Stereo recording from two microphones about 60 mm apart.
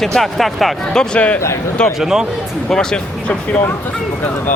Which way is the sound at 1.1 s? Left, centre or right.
Left.